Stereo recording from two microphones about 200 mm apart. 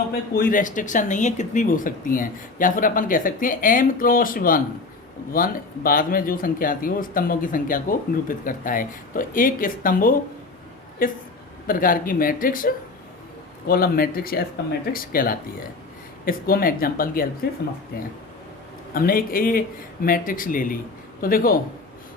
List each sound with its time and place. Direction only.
0.3 s speech: 45° left (ahead or behind)
18.9 s speech: 45° left (ahead or behind)